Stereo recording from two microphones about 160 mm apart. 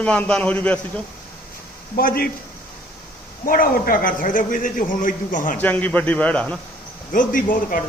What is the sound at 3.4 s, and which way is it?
A man's voice, 65° left (ahead or behind).